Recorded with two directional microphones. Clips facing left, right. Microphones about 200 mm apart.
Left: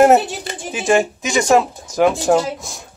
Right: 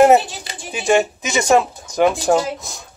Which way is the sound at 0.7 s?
Centre (ahead or behind).